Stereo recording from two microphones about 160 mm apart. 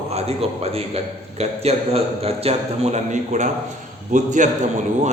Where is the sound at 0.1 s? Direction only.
40° right (ahead or behind).